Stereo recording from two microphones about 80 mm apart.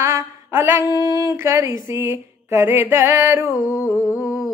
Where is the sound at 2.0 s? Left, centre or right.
Right.